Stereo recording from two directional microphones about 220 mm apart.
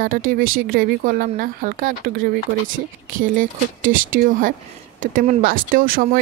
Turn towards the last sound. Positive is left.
turn(degrees=-40)  # may be behind; listen again after turning